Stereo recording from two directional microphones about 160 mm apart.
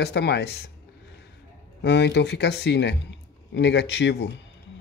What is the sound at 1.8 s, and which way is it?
Chopping, 90° left.